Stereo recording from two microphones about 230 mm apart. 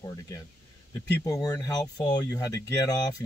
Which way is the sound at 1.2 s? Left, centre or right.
Centre.